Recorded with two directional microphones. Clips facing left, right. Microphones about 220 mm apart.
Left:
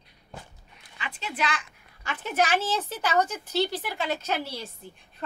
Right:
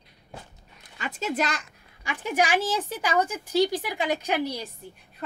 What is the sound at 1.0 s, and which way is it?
Speech, 45° right (ahead or behind).